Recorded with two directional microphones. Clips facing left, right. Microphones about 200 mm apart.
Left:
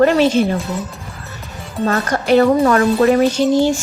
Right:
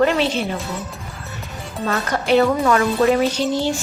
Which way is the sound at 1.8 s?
45° left (ahead or behind).